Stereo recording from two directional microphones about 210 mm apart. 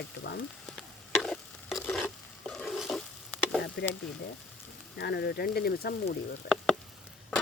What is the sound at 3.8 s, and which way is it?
Frying, 55° left (ahead or behind).